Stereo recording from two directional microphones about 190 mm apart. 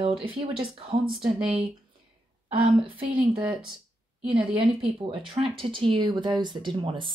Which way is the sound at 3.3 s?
10° right (ahead or behind).